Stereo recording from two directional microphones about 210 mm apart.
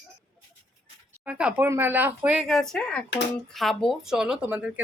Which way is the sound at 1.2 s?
10° right (ahead or behind).